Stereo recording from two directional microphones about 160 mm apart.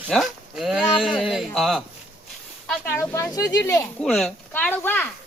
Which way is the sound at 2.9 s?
15° left (ahead or behind).